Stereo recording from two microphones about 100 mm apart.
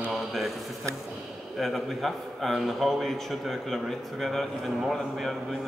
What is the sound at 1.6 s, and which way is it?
A man's voice, centre (ahead or behind).